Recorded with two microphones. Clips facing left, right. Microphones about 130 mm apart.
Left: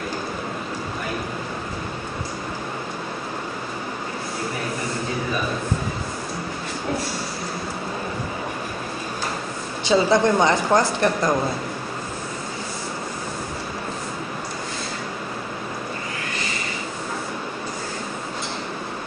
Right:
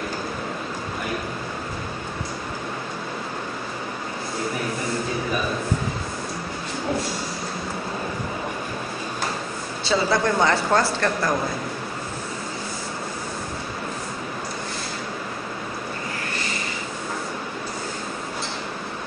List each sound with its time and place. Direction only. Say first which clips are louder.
9.8 s speech: left 4 dB; 20° left (ahead or behind)